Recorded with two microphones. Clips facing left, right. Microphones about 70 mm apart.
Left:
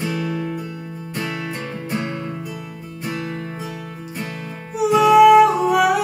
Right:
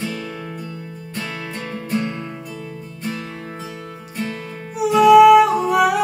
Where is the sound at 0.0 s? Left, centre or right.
Centre.